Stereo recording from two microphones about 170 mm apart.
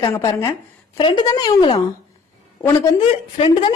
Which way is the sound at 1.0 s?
25° left (ahead or behind).